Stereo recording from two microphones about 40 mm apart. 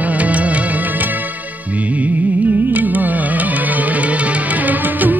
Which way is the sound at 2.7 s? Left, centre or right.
Right.